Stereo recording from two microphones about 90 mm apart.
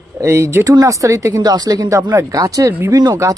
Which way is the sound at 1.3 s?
50° right (ahead or behind).